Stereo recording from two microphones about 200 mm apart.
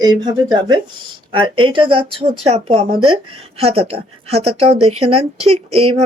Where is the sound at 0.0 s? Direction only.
20° right (ahead or behind).